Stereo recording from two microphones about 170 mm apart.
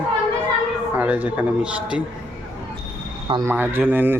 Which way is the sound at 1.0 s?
10° right (ahead or behind).